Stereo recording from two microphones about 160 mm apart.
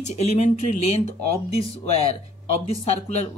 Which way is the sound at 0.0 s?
45° left (ahead or behind).